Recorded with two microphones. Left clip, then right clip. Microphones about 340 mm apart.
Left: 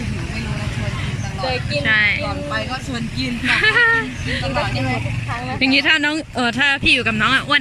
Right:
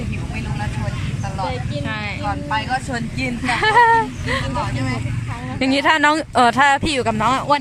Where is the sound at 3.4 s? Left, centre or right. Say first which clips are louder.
Right 1 dB; centre.